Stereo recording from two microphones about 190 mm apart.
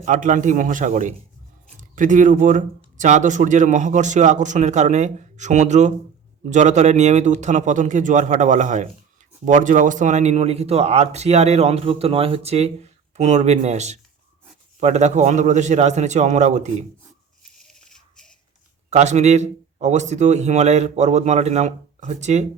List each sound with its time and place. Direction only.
0.0 s a man's voice: 40° right (ahead or behind)
17.8 s a sound: 5° left (ahead or behind)
18.9 s speech: 35° right (ahead or behind)